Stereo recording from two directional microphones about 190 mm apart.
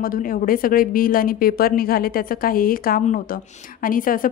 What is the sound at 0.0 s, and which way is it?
A woman's voice, 45° left (ahead or behind).